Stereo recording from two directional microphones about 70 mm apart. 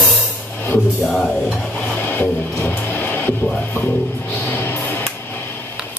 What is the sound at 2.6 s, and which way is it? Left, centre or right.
Speech, left.